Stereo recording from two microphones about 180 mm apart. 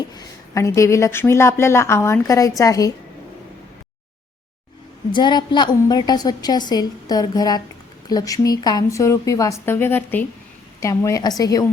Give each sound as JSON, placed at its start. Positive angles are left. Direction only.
{"t": 0.1, "sound": "a woman's voice", "side_deg": 20}
{"t": 5.1, "sound": "a woman's voice", "side_deg": 25}